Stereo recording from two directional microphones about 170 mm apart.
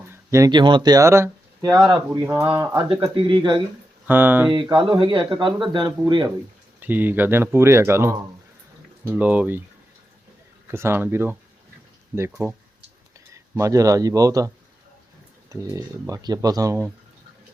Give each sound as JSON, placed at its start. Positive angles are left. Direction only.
{"t": 0.0, "sound": "speech", "side_deg": -15}
{"t": 4.0, "sound": "speech", "side_deg": -10}
{"t": 4.8, "sound": "speech", "side_deg": -30}
{"t": 6.7, "sound": "speech", "side_deg": -10}
{"t": 10.7, "sound": "speech", "side_deg": -15}